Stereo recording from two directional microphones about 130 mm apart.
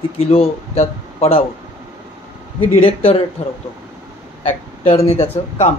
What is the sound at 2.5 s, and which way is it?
Speech, 45° left (ahead or behind).